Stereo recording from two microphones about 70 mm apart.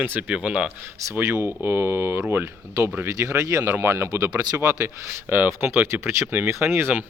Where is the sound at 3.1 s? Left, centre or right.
Right.